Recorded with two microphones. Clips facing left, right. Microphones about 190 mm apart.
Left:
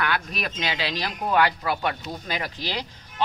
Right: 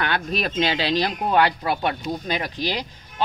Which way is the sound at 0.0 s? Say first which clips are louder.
Right 3 dB; 30° right (ahead or behind).